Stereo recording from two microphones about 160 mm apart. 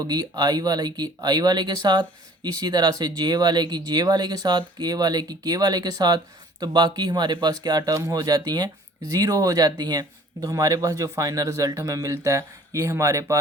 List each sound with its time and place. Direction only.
0.0 s speech: 25° right (ahead or behind)